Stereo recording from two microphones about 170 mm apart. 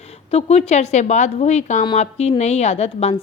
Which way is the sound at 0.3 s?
40° left (ahead or behind).